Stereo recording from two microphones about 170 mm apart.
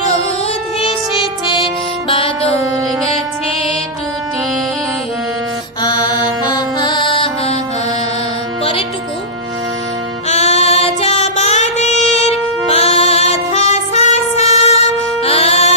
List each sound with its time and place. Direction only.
2.0 s music: 30° left (ahead or behind)
5.8 s music: 25° left (ahead or behind)
10.2 s music: 40° left (ahead or behind)